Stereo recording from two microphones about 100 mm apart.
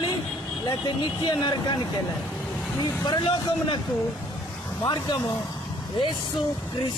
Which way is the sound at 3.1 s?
55° left (ahead or behind).